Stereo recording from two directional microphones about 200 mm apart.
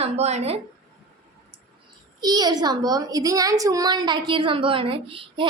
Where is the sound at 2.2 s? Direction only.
20° right (ahead or behind).